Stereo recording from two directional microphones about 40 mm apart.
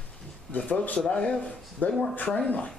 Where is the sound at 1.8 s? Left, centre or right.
Left.